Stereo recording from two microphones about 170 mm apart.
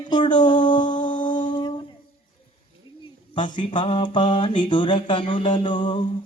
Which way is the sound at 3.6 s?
30° left (ahead or behind).